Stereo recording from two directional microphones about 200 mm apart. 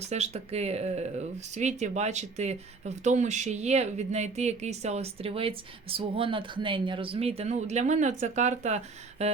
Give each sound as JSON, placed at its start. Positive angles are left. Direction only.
{"t": 0.0, "sound": "speech", "side_deg": -35}